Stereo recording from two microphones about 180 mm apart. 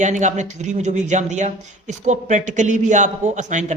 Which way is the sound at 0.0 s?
40° right (ahead or behind).